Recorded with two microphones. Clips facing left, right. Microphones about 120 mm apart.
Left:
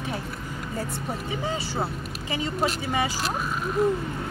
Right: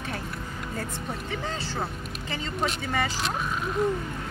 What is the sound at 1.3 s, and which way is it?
Speech, 10° left (ahead or behind).